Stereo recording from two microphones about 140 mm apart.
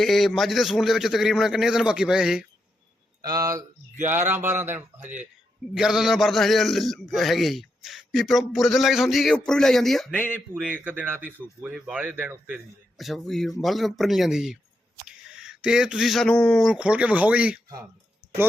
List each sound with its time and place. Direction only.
0.0 s a man's voice: centre (ahead or behind)
3.2 s speech: 25° right (ahead or behind)
4.0 s a man's voice: 15° right (ahead or behind); by 10.2 s centre (ahead or behind)
10.8 s speech: 15° right (ahead or behind)
12.5 s a man's voice: centre (ahead or behind)
16.7 s speech: 10° right (ahead or behind)